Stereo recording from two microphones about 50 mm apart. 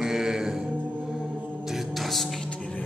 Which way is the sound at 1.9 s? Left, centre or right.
Centre.